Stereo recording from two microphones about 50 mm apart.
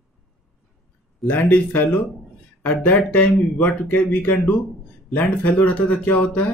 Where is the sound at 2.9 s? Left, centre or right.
Left.